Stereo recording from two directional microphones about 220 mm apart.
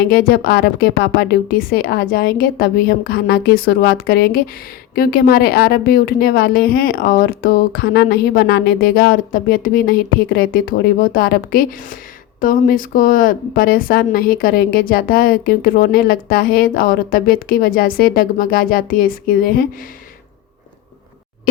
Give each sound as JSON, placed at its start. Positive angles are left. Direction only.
{"t": 0.1, "sound": "a woman's voice", "side_deg": 45}